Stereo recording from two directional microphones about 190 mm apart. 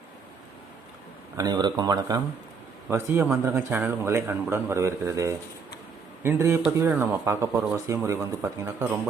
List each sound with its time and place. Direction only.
1.4 s a man's voice: 20° right (ahead or behind)